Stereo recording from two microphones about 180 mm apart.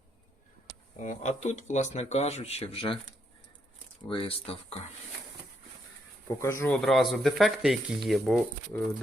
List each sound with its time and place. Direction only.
0.9 s speech: 40° left (ahead or behind)
4.1 s speech: 30° left (ahead or behind)
6.4 s speech: 15° left (ahead or behind)
6.8 s speech: centre (ahead or behind)